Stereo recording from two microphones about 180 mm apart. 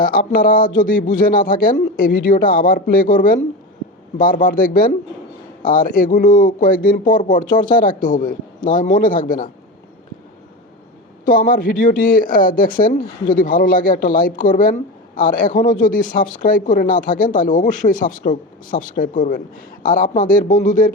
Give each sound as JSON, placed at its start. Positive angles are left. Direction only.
{"t": 0.0, "sound": "speech", "side_deg": 50}
{"t": 11.3, "sound": "speech", "side_deg": 50}